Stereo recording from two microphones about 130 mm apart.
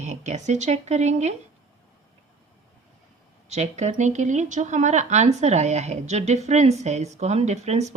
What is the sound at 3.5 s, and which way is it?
Speech, 60° right (ahead or behind).